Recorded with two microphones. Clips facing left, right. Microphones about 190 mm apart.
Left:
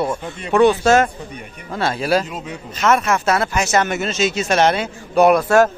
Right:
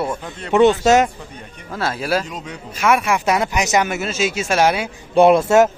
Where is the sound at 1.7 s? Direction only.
5° right (ahead or behind).